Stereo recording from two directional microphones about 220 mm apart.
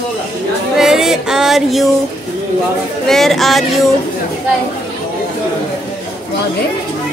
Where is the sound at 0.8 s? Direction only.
Centre (ahead or behind).